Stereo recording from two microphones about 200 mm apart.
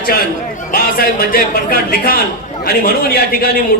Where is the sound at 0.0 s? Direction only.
45° left (ahead or behind).